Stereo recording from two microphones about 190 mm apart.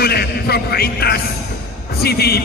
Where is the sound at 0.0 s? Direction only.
55° left (ahead or behind).